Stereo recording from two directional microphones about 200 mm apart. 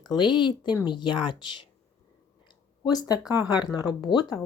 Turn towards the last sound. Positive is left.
turn(degrees=20)  # may be behind; listen again after turning